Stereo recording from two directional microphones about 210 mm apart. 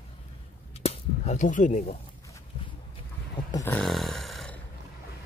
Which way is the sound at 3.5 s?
15° left (ahead or behind).